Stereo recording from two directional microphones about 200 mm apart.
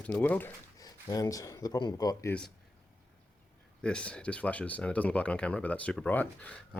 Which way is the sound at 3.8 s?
5° left (ahead or behind).